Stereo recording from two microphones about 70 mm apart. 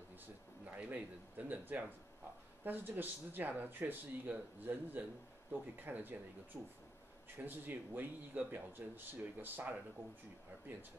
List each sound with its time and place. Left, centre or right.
0.7 s speech: right